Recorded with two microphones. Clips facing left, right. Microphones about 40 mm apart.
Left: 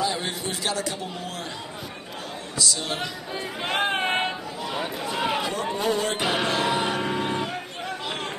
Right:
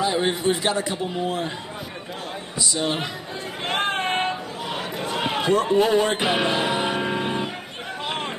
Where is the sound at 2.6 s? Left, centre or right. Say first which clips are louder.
Right 3 dB; right.